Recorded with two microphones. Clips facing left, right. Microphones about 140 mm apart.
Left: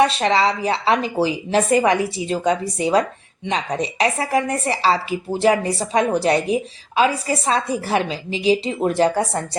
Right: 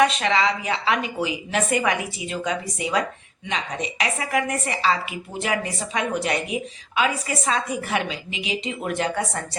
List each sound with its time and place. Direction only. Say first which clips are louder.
0.0 s speech: left 3 dB; 35° left (ahead or behind)